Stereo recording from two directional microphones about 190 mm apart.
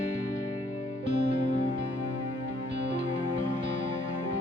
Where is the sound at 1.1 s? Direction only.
40° left (ahead or behind).